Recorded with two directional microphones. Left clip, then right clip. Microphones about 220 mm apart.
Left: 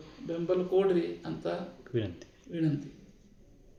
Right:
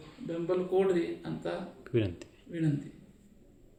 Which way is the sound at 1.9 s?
30° right (ahead or behind).